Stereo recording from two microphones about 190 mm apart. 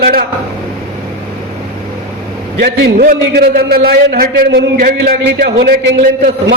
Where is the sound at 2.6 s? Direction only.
55° right (ahead or behind).